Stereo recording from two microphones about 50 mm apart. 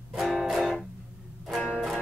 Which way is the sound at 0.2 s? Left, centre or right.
Centre.